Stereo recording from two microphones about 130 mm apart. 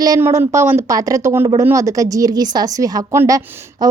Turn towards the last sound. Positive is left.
turn(degrees=-25)  # may be behind; listen again after turning